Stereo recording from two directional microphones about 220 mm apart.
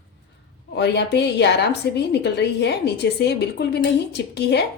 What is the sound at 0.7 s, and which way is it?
Speech, 50° left (ahead or behind).